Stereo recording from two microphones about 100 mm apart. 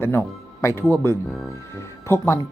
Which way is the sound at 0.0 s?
25° left (ahead or behind).